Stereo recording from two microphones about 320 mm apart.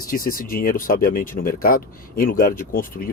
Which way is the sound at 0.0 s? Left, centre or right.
Left.